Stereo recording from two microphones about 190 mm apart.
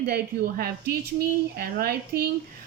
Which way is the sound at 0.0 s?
55° right (ahead or behind).